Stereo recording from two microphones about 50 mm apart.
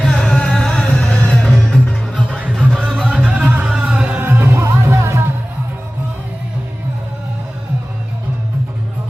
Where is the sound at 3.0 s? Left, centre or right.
Right.